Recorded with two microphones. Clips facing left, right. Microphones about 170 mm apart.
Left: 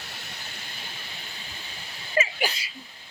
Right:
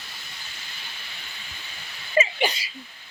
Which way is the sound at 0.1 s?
65° left (ahead or behind).